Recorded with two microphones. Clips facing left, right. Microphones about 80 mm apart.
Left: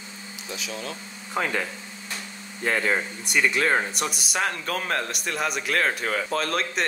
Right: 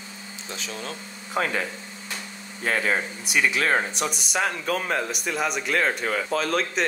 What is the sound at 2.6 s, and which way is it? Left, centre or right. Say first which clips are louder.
Speech: even; centre.